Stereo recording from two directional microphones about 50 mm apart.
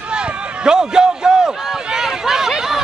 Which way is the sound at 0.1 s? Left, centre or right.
Centre.